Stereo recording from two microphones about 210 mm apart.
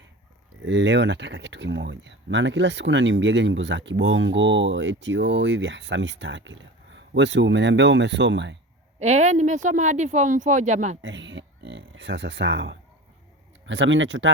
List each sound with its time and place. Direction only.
0.6 s speech: 60° right (ahead or behind)
9.0 s speech: 35° right (ahead or behind)
11.0 s speech: 60° right (ahead or behind)